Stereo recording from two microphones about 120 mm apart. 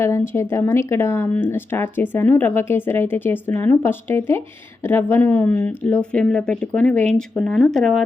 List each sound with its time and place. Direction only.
0.0 s speech: 25° left (ahead or behind); by 8.0 s 5° left (ahead or behind)